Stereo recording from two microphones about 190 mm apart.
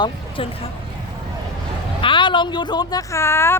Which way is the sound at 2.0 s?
25° left (ahead or behind).